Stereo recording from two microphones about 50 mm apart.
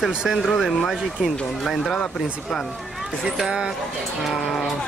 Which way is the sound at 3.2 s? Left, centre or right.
Centre.